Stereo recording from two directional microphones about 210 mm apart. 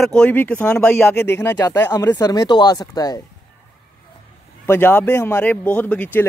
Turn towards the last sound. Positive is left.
turn(degrees=10)  # may be behind; listen again after turning